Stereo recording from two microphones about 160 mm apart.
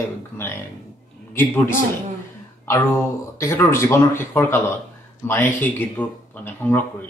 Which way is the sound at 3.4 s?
15° left (ahead or behind).